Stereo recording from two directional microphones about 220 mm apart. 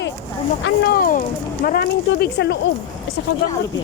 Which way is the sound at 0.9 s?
40° left (ahead or behind).